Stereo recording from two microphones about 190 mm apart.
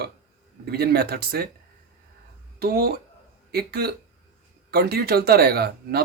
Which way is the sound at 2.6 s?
55° right (ahead or behind).